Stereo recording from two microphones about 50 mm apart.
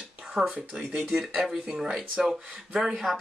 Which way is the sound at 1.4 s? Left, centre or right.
Centre.